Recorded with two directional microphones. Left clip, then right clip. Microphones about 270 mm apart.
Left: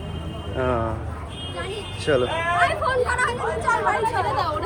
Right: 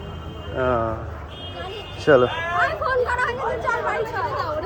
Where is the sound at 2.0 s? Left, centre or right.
Centre.